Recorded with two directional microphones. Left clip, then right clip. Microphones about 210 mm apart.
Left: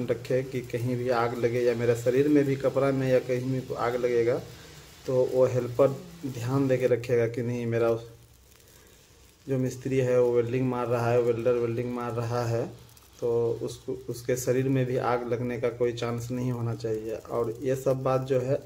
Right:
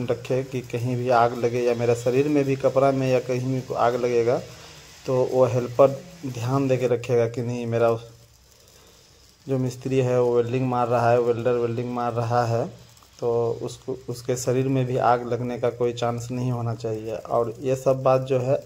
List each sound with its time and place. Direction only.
0.0 s a man's voice: 20° right (ahead or behind)
9.5 s a man's voice: 20° right (ahead or behind)